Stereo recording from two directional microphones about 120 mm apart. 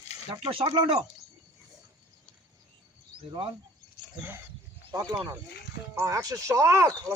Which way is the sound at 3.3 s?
45° right (ahead or behind).